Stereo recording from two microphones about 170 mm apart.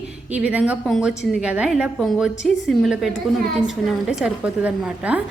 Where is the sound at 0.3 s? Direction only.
5° right (ahead or behind).